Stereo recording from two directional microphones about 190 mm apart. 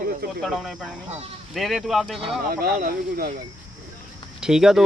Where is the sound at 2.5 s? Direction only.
50° right (ahead or behind).